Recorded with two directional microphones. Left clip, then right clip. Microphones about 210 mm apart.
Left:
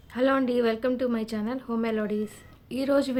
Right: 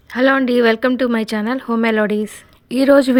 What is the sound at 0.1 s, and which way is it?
Speech, 40° right (ahead or behind).